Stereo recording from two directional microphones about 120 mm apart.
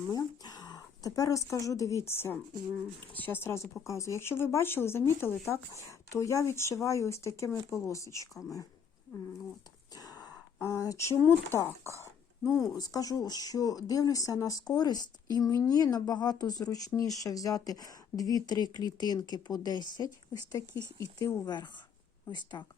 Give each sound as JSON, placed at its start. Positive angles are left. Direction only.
{"t": 0.1, "sound": "speech", "side_deg": 35}
{"t": 9.9, "sound": "a sound", "side_deg": 30}
{"t": 11.2, "sound": "speech", "side_deg": 20}